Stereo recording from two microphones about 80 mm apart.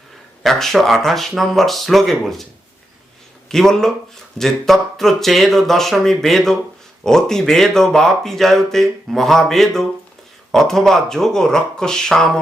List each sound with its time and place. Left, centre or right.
0.4 s speech: centre
3.5 s speech: centre